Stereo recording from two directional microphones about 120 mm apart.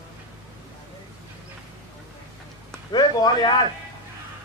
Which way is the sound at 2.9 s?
35° left (ahead or behind).